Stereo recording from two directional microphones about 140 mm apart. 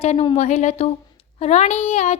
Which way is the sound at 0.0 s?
45° left (ahead or behind).